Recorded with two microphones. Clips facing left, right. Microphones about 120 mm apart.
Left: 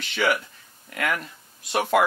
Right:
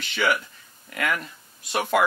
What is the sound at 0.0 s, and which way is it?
Speech, 50° left (ahead or behind).